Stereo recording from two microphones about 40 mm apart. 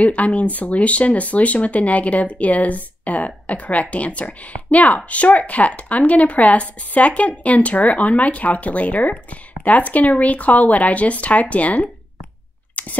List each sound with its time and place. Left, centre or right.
0.0 s speech: left
12.8 s scissors: left